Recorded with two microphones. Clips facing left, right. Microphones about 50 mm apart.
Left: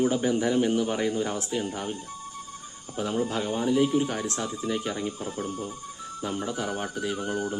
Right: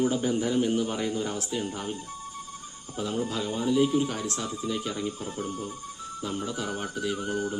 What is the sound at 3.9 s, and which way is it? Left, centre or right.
Speech, centre.